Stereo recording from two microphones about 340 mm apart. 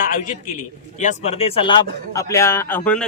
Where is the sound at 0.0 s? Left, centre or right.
Left.